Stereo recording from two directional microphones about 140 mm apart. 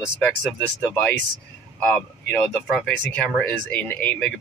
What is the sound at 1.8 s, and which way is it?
Speech, 10° left (ahead or behind).